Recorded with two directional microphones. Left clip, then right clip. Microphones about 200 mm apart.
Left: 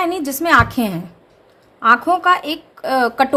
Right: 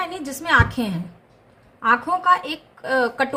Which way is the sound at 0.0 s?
50° left (ahead or behind).